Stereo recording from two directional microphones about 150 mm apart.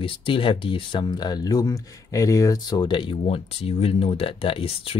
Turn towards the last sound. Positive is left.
turn(degrees=40)  # may be behind; listen again after turning